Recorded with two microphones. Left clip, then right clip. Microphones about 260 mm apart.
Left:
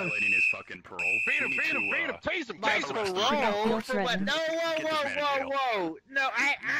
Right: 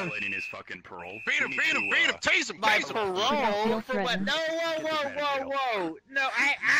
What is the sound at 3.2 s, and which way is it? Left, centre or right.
A man's voice, centre.